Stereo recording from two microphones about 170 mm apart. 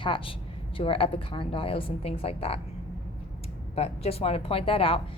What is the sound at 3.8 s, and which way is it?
A woman's voice, 35° left (ahead or behind).